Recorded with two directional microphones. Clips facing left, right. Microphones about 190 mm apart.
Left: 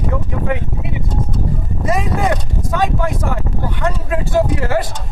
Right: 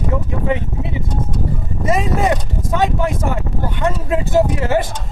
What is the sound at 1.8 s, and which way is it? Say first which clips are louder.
A man's voice: right 1 dB; 20° right (ahead or behind).